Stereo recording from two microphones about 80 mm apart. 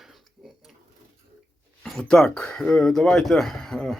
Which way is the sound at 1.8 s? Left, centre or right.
Centre.